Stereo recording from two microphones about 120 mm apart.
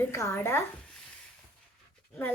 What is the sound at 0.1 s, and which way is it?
Speech, 20° left (ahead or behind).